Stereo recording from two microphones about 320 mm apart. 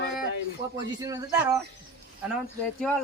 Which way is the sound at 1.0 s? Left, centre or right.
Centre.